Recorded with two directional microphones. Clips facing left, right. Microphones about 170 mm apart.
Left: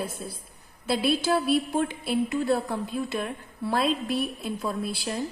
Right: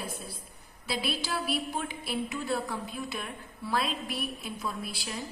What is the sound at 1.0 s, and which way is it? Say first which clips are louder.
A woman's voice: left 9 dB; 50° left (ahead or behind).